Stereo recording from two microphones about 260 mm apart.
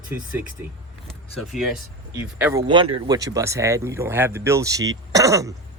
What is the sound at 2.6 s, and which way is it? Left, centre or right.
Speech, centre.